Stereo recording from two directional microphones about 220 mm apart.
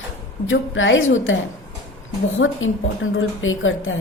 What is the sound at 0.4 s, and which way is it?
Speech, 60° left (ahead or behind).